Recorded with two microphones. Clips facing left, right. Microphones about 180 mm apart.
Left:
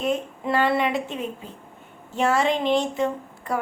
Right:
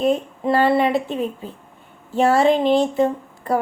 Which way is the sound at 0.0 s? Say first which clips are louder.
Right 6 dB; 35° right (ahead or behind).